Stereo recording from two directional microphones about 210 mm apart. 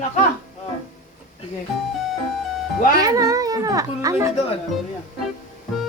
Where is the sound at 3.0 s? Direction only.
15° right (ahead or behind).